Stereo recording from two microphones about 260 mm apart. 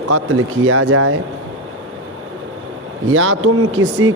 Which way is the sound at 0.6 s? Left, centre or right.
Right.